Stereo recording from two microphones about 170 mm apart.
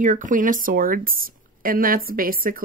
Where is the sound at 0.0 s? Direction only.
50° right (ahead or behind).